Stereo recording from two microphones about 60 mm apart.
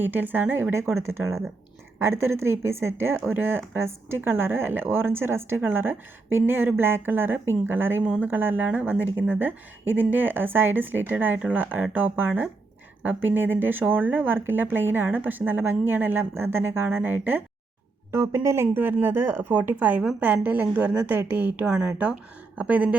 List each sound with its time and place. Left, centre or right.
0.0 s speech: right
0.7 s a woman's voice: right
18.1 s a woman's voice: right
18.8 s speech: right
21.7 s speech: centre